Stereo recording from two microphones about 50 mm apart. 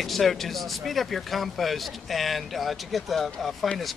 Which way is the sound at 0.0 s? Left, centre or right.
Centre.